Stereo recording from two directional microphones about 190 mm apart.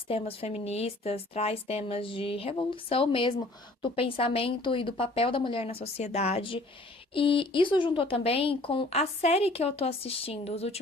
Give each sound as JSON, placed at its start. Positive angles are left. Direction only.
{"t": 0.1, "sound": "a woman's voice", "side_deg": 30}